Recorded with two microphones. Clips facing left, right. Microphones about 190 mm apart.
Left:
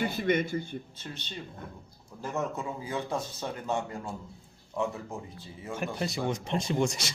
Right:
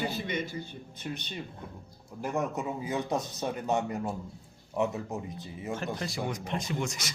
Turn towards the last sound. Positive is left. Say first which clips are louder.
# left 5 dB
turn(degrees=30)  # may be behind; listen again after turning